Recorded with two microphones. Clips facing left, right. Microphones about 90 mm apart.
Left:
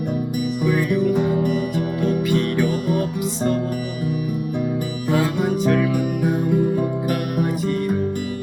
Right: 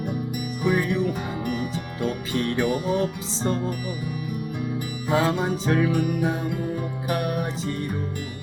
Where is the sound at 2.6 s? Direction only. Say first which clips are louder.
Left 2 dB; 30° right (ahead or behind).